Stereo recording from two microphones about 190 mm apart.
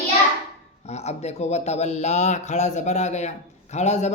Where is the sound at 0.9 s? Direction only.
35° left (ahead or behind).